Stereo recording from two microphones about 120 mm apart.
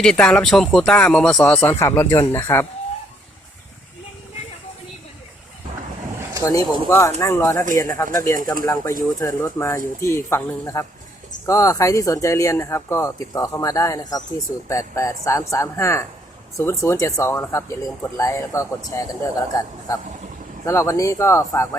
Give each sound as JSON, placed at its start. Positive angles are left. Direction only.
{"t": 0.0, "sound": "speech", "side_deg": 5}
{"t": 1.8, "sound": "speech", "side_deg": 20}
{"t": 6.4, "sound": "speech", "side_deg": 30}